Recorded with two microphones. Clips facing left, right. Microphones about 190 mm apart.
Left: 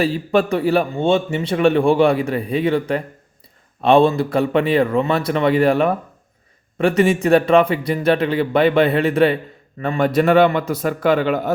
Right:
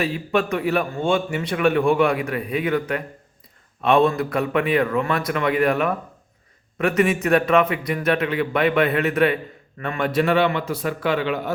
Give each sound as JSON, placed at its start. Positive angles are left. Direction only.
{"t": 0.0, "sound": "a man's voice", "side_deg": 35}